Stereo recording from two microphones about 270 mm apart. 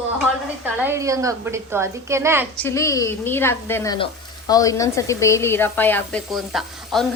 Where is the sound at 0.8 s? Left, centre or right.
Centre.